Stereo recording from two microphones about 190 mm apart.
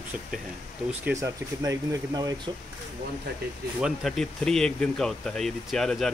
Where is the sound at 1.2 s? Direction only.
15° right (ahead or behind).